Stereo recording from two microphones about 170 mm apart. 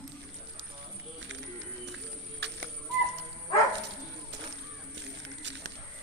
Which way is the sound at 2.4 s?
85° right.